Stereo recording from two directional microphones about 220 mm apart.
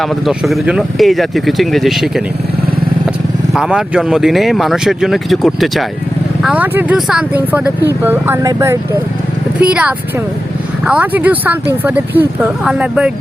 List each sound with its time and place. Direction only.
0.0 s speech: centre (ahead or behind)
3.5 s speech: 5° right (ahead or behind)